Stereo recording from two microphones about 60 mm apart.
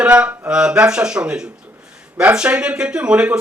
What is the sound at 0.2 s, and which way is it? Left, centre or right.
Speech, centre.